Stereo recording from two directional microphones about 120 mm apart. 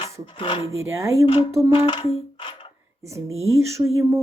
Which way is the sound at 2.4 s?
45° left (ahead or behind).